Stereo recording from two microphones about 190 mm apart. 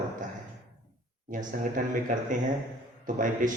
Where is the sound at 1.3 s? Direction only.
45° right (ahead or behind).